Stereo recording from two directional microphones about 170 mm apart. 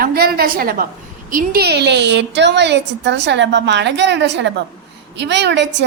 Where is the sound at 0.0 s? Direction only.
65° right (ahead or behind).